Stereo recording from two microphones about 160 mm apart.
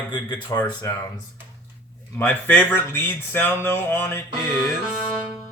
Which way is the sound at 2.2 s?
10° left (ahead or behind).